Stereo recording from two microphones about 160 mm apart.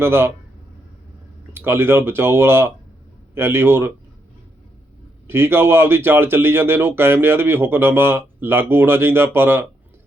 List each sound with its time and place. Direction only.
0.0 s speech: 15° right (ahead or behind)
1.5 s speech: 15° right (ahead or behind)
5.3 s speech: 15° right (ahead or behind)